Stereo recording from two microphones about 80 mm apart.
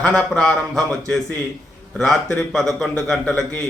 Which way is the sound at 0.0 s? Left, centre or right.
Centre.